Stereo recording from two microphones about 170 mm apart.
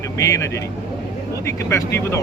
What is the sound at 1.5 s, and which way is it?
Speech, 15° left (ahead or behind).